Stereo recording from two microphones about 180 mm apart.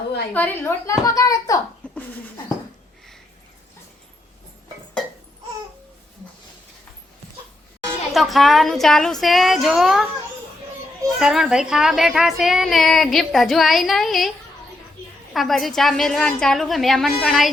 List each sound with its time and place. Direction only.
0.3 s a woman's voice: 10° left (ahead or behind)
8.1 s a woman's voice: centre (ahead or behind)
11.2 s a woman's voice: centre (ahead or behind)
15.3 s a woman's voice: centre (ahead or behind)